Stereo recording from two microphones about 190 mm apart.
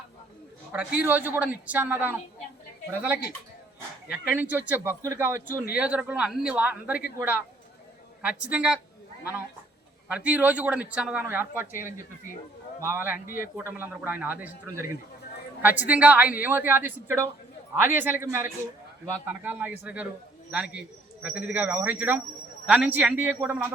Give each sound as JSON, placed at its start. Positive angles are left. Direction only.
{"t": 0.7, "sound": "a man's voice", "side_deg": -5}
{"t": 4.1, "sound": "a man's voice", "side_deg": -10}
{"t": 10.1, "sound": "a man's voice", "side_deg": -5}
{"t": 13.2, "sound": "speech", "side_deg": 45}
{"t": 13.7, "sound": "a man's voice", "side_deg": -10}